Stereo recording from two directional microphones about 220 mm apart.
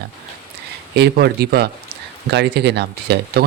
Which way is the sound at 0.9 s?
45° right (ahead or behind).